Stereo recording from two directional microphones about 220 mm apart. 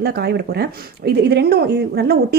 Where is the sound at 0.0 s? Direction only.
50° right (ahead or behind).